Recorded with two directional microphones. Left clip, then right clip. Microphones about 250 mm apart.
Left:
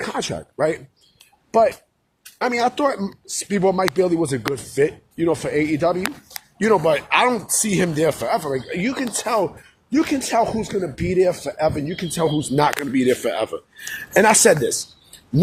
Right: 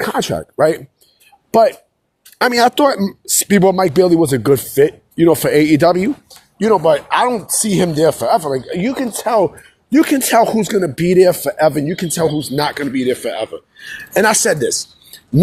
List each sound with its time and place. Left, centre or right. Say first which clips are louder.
0.0 s speech: right 8 dB; right
6.6 s speech: right 5 dB; centre
9.9 s speech: right 7 dB; right
12.1 s speech: right 4 dB; centre
12.5 s speech: right 1 dB; centre
14.2 s speech: right 1 dB; centre